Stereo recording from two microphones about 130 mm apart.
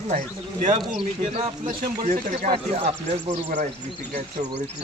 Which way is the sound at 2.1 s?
70° right (ahead or behind).